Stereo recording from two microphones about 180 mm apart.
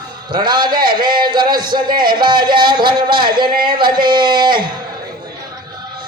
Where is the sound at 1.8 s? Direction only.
55° right (ahead or behind).